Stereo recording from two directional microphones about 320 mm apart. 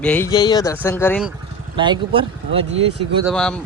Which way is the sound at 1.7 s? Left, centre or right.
Centre.